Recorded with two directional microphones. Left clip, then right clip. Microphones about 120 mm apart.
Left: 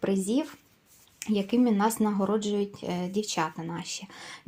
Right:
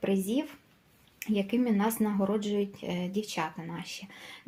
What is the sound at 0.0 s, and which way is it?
Speech, 45° left (ahead or behind).